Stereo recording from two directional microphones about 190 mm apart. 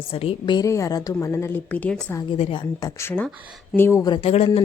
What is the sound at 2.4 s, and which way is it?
Speech, 25° left (ahead or behind).